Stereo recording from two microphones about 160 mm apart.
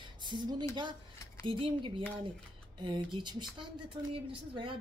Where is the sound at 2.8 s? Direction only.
30° right (ahead or behind).